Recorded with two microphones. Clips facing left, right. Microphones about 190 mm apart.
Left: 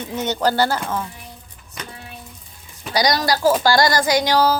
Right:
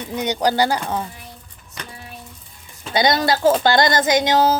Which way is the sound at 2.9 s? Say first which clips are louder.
Right 1 dB; 25° right (ahead or behind).